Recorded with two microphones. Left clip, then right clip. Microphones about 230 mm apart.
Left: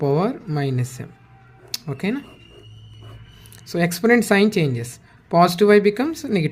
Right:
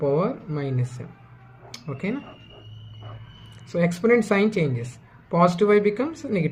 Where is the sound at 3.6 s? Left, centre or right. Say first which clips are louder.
Left 2 dB; left.